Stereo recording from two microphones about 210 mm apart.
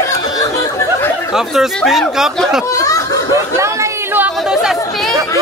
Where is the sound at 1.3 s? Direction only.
Centre (ahead or behind).